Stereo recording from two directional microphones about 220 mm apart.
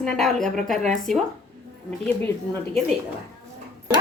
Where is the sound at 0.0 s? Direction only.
Centre (ahead or behind).